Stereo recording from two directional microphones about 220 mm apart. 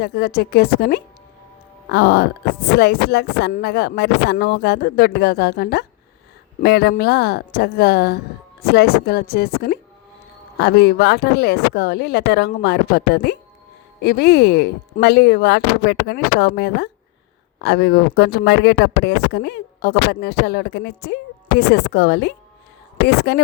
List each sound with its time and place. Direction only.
0.0 s speech: 45° left (ahead or behind)